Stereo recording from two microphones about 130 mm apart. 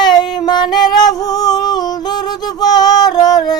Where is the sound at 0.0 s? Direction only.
35° left (ahead or behind).